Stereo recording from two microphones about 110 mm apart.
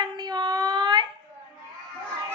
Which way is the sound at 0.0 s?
40° right (ahead or behind).